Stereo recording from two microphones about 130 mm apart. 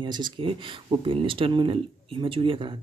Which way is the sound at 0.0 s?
35° right (ahead or behind).